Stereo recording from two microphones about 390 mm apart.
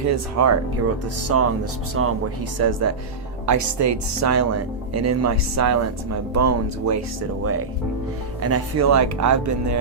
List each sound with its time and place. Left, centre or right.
0.0 s speech: right
8.4 s speech: right